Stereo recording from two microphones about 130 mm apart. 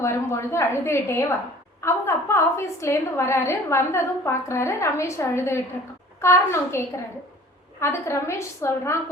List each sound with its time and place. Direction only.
0.0 s a woman's voice: 20° left (ahead or behind)